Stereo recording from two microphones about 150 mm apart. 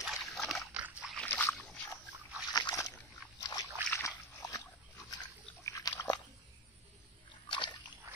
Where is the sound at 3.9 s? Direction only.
20° left (ahead or behind).